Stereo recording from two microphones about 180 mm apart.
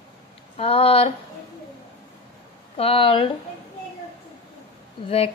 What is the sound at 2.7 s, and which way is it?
Speech, 30° left (ahead or behind).